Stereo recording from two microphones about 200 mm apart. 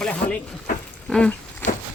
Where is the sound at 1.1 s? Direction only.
5° left (ahead or behind).